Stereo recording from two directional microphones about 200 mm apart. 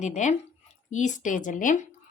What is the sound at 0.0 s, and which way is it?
Speech, 35° left (ahead or behind).